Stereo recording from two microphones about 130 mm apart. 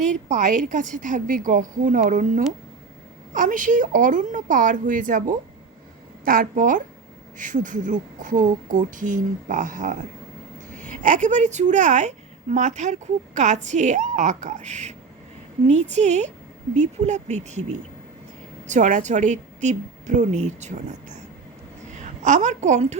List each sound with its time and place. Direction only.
0.3 s a woman's voice: 75° right (ahead or behind)
7.3 s a woman's voice: 80° right; by 23.0 s 60° right (ahead or behind)